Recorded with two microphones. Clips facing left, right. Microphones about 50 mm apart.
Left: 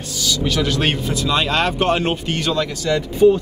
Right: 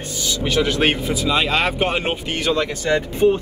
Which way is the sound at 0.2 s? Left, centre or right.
Right.